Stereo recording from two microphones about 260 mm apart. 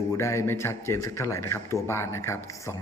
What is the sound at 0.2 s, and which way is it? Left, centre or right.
Speech, centre.